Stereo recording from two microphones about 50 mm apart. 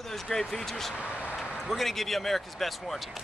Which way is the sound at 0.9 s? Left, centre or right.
Left.